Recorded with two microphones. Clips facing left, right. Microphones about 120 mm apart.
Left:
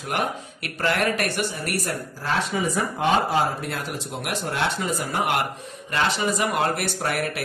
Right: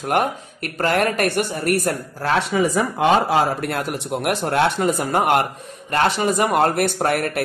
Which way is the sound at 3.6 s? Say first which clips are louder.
Right 6 dB; 60° right (ahead or behind).